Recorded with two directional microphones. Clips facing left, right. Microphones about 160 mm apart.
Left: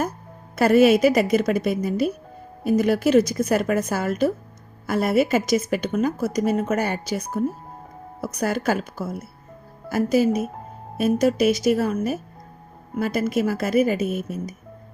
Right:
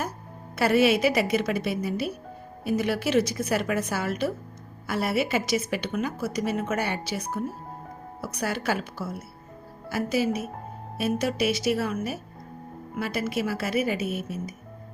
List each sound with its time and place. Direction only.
0.5 s a woman's voice: 45° left (ahead or behind)